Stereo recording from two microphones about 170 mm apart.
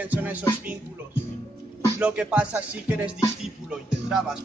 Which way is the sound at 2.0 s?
5° right (ahead or behind).